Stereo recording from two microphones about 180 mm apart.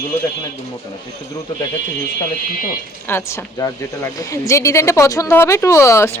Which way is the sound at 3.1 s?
15° left (ahead or behind).